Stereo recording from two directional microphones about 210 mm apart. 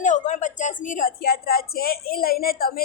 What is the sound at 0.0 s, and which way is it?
Speech, 35° left (ahead or behind).